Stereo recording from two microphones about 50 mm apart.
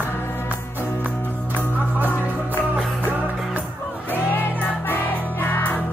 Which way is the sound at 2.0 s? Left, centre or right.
Left.